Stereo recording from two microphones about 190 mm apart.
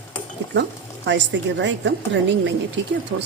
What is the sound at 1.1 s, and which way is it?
Speech, 70° right (ahead or behind).